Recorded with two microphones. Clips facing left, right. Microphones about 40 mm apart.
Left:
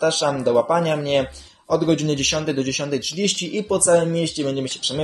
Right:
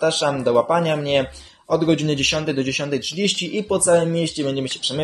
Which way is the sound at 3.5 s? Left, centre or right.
Right.